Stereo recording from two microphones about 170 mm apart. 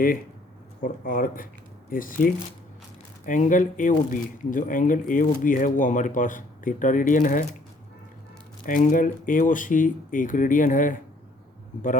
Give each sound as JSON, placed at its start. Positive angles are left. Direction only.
{"t": 0.8, "sound": "speech", "side_deg": 55}
{"t": 8.6, "sound": "speech", "side_deg": 50}